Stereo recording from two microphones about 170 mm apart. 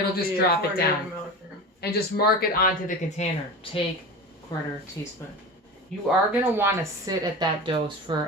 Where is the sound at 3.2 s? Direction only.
40° left (ahead or behind).